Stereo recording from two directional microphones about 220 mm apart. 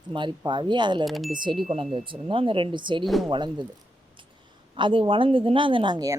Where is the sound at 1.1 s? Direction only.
Centre (ahead or behind).